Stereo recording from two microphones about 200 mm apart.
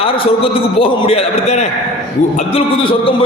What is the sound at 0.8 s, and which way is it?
Speech, 30° left (ahead or behind).